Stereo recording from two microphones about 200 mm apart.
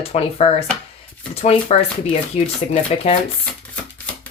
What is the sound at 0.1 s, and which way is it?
Speech, 30° left (ahead or behind).